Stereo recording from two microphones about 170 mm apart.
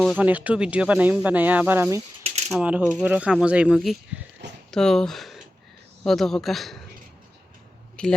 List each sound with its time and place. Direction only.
0.2 s speech: 10° right (ahead or behind)
8.0 s speech: 5° left (ahead or behind)